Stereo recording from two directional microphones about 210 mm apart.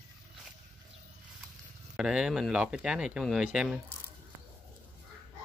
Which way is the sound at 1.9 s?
5° right (ahead or behind).